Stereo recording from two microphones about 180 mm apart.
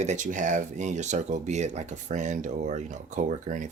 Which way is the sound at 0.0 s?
40° right (ahead or behind).